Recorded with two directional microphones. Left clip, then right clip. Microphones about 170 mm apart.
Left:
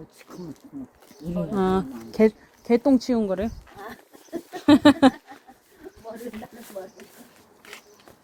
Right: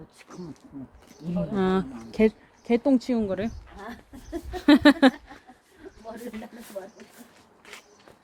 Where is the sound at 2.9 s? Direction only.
10° right (ahead or behind).